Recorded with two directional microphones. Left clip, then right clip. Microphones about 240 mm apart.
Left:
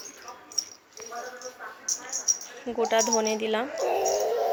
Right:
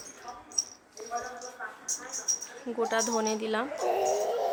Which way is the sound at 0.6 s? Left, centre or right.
Left.